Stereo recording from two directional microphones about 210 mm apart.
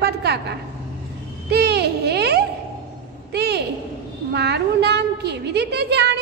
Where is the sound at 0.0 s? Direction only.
50° right (ahead or behind).